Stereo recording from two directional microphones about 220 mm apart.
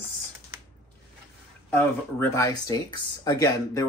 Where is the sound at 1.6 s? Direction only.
10° left (ahead or behind).